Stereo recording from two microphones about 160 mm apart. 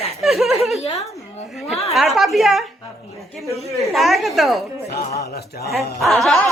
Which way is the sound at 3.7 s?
Centre (ahead or behind).